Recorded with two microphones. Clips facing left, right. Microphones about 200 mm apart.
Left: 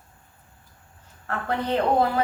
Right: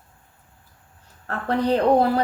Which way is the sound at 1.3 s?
35° right (ahead or behind).